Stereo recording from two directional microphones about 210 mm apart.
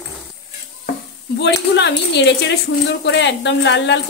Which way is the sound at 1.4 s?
55° left (ahead or behind).